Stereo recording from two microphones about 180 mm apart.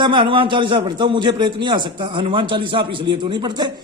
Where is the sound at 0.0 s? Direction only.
25° right (ahead or behind).